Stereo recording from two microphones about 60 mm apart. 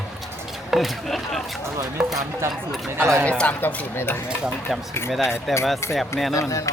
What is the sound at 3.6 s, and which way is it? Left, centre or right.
Speech, left.